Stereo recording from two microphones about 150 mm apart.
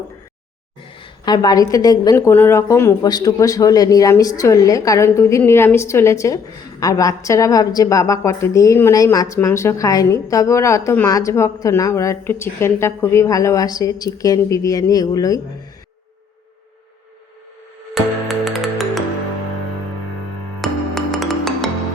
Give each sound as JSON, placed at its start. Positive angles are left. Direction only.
{"t": 0.9, "sound": "a woman's voice", "side_deg": 30}
{"t": 17.9, "sound": "music", "side_deg": 0}
{"t": 20.6, "sound": "music", "side_deg": 0}